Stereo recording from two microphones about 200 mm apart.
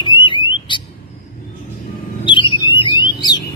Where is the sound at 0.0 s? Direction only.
25° left (ahead or behind).